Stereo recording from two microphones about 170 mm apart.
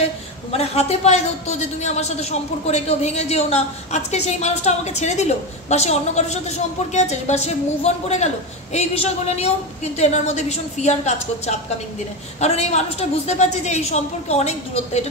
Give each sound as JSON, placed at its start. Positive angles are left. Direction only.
{"t": 0.5, "sound": "a man's voice", "side_deg": 35}